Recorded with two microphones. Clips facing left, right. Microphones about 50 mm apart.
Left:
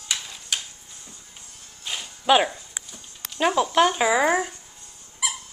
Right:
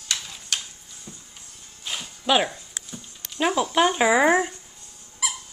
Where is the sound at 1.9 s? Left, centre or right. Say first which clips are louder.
Left 3 dB; centre.